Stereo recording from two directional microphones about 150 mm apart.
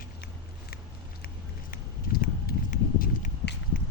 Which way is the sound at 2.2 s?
75° left (ahead or behind).